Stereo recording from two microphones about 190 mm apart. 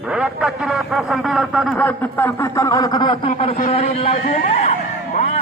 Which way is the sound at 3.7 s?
35° left (ahead or behind).